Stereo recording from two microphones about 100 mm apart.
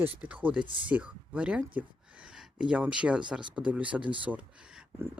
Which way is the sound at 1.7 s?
10° right (ahead or behind).